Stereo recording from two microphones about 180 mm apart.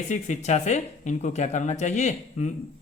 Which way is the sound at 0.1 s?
40° left (ahead or behind).